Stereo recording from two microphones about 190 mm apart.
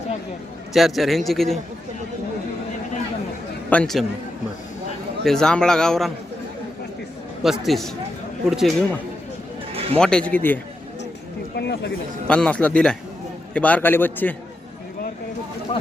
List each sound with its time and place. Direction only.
0.7 s a man's voice: centre (ahead or behind)
3.7 s a man's voice: 5° left (ahead or behind)
5.2 s a man's voice: 5° left (ahead or behind)
7.4 s a man's voice: centre (ahead or behind)
9.7 s a sound: 30° right (ahead or behind)
10.0 s a man's voice: 5° left (ahead or behind)
11.5 s speech: 60° left (ahead or behind)
12.3 s a man's voice: 5° left (ahead or behind)